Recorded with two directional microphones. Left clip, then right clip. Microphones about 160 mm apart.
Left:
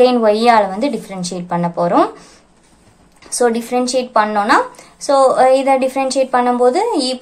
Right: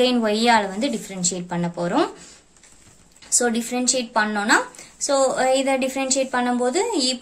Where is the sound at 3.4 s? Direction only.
20° right (ahead or behind).